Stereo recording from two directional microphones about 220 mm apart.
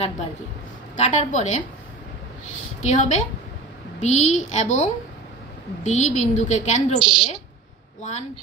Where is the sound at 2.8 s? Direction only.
30° left (ahead or behind).